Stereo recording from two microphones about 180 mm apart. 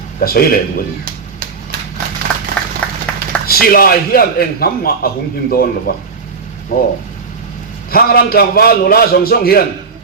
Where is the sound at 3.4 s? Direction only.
55° left (ahead or behind).